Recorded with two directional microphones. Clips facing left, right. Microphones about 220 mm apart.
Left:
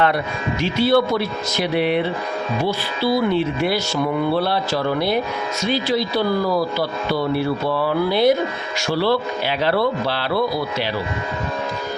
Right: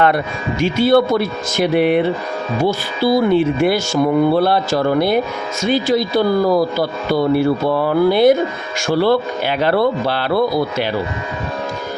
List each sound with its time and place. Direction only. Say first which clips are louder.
0.6 s speech: right 4 dB; 50° right (ahead or behind)